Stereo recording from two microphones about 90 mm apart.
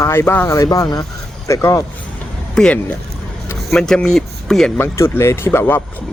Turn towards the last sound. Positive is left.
turn(degrees=25)  # may be behind; listen again after turning